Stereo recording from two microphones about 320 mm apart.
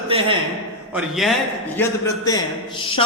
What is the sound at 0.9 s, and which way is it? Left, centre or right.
A man's voice, centre.